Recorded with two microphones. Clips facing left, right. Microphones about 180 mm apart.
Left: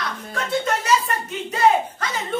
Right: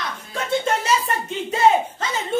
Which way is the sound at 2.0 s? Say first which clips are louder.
Right 1 dB; 25° right (ahead or behind).